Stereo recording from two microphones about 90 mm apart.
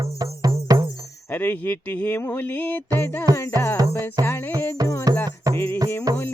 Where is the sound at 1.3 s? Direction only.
20° left (ahead or behind).